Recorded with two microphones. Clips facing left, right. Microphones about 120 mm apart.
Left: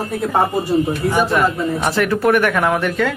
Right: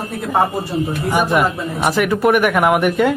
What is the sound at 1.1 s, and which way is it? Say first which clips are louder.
Speech: right 1 dB; 15° right (ahead or behind).